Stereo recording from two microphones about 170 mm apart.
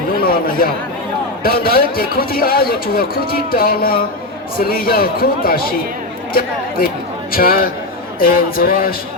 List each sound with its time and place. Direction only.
0.2 s a man's voice: 60° left (ahead or behind)